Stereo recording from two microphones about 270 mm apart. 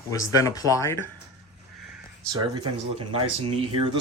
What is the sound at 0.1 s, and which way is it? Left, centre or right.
Speech, centre.